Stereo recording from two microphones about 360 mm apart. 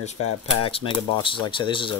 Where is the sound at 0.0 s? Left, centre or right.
Centre.